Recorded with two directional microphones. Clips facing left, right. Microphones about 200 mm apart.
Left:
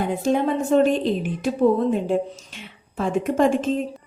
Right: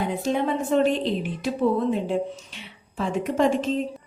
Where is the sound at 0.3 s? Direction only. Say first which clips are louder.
Left 4 dB; 50° left (ahead or behind).